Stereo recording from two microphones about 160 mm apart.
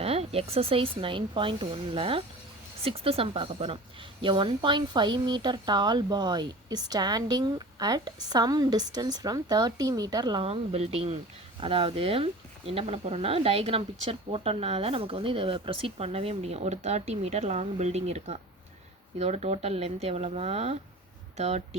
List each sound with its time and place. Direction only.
0.0 s speech: 40° right (ahead or behind)
10.4 s speech: 40° right (ahead or behind)